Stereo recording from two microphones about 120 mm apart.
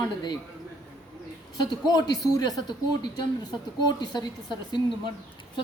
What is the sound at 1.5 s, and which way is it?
Speech, 35° left (ahead or behind).